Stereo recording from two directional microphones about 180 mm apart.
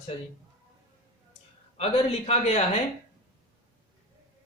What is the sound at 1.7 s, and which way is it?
Speech, 35° left (ahead or behind).